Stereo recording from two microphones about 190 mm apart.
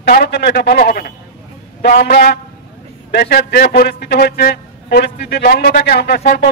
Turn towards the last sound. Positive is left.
turn(degrees=55)  # may be behind; listen again after turning